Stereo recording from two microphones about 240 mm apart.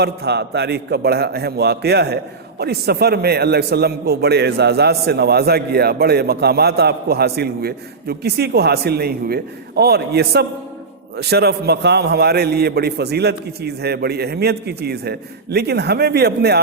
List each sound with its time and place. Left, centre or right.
0.0 s a man's voice: right